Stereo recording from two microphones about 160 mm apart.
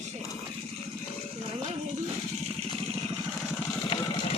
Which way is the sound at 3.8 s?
35° left (ahead or behind).